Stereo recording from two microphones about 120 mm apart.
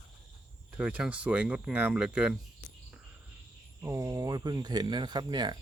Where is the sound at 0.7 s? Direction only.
10° right (ahead or behind).